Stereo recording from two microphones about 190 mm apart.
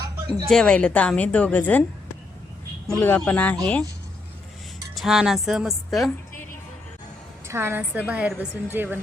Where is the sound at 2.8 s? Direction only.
5° left (ahead or behind).